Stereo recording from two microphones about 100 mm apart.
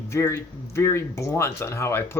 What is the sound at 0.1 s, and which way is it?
Speech, 30° left (ahead or behind).